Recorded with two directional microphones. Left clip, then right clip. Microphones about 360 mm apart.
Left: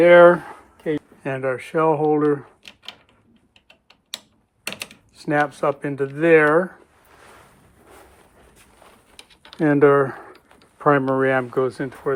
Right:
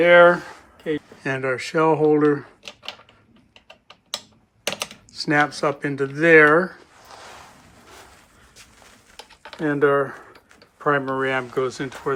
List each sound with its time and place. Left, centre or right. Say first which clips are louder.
0.0 s speech: left 2 dB; centre
1.2 s speech: right 2 dB; centre
5.1 s speech: right 1 dB; centre
9.6 s speech: left 4 dB; centre